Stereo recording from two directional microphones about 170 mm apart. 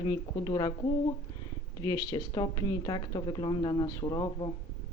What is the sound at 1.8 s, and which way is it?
A woman's voice, 20° left (ahead or behind).